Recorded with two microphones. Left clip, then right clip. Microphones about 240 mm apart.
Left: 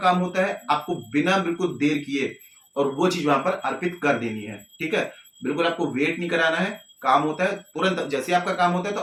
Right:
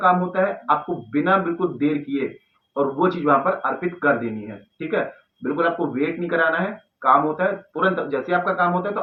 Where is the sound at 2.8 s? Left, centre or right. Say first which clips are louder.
Right 2 dB; left.